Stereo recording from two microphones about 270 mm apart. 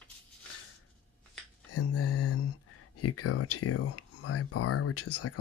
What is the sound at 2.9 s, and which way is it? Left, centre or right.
Speech, left.